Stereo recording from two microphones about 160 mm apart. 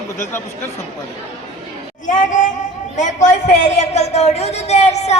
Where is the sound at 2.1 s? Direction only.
55° left (ahead or behind).